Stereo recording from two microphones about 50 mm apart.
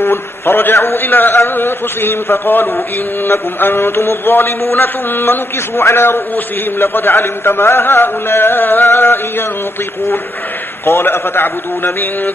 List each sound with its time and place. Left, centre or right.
0.0 s a man's voice: left
10.9 s a man's voice: left